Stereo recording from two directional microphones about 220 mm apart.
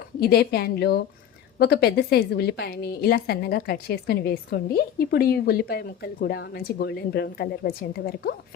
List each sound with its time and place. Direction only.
0.2 s a woman's voice: 45° left (ahead or behind)